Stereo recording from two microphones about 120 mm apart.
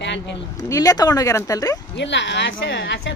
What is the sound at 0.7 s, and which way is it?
Speech, 30° left (ahead or behind).